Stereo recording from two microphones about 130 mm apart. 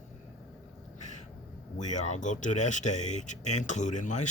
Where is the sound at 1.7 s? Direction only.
65° left (ahead or behind).